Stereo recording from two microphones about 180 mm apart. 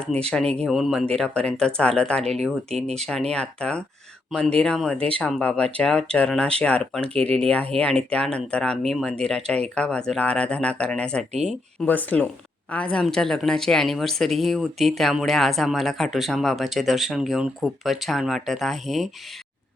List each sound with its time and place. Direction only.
0.3 s speech: 5° left (ahead or behind)
2.8 s speech: 35° right (ahead or behind)
3.3 s speech: 5° left (ahead or behind)